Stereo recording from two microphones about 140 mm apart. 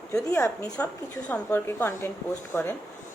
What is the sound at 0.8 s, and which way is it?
Speech, 10° left (ahead or behind).